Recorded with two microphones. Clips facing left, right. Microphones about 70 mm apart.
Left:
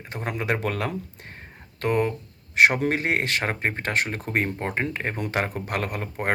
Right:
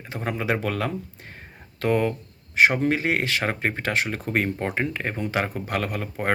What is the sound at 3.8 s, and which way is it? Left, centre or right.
Speech, left.